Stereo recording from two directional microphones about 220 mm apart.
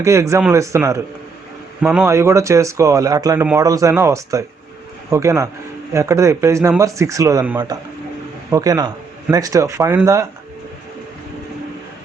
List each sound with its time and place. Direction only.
0.0 s speech: 15° right (ahead or behind)